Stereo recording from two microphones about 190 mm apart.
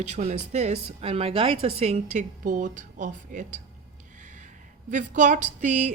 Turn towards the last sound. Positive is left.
turn(degrees=-40)  # may be behind; listen again after turning